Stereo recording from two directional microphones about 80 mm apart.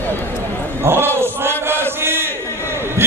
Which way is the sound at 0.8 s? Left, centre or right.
Right.